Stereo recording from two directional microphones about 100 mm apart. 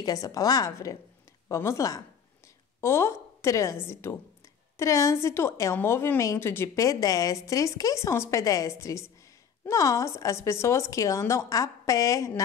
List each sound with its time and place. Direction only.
0.0 s a woman's voice: 40° left (ahead or behind)